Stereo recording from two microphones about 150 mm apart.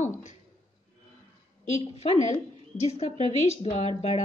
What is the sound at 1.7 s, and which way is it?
A woman's voice, 40° left (ahead or behind).